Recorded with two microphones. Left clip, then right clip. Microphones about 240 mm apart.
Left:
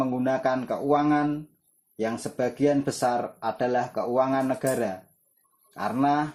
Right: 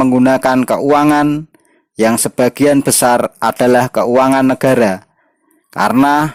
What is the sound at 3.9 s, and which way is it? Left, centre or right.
Speech, right.